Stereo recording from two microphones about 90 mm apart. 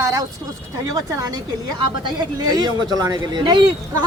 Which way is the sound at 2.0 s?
50° right (ahead or behind).